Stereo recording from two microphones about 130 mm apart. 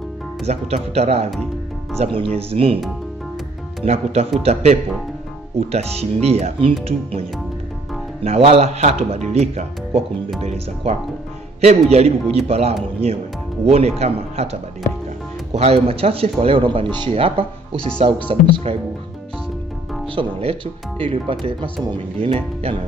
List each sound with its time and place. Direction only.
0.5 s speech: 55° right (ahead or behind)
3.8 s a man's voice: 55° right (ahead or behind)
20.2 s speech: 45° right (ahead or behind)